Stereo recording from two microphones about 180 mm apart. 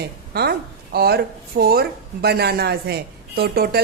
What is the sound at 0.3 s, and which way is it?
A woman's voice, 60° right (ahead or behind).